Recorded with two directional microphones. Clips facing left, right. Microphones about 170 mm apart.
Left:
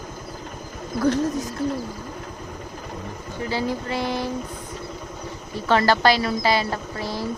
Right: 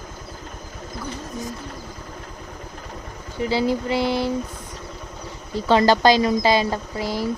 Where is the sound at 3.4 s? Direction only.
10° right (ahead or behind).